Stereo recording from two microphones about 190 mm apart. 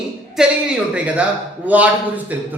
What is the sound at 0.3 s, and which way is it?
A man's voice, 5° right (ahead or behind).